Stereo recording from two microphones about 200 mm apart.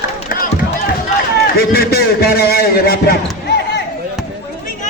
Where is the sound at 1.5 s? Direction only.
50° left (ahead or behind).